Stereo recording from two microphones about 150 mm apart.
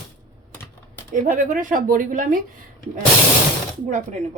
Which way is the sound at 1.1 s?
60° right (ahead or behind).